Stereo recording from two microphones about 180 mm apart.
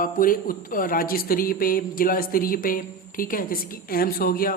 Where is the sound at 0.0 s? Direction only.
50° left (ahead or behind).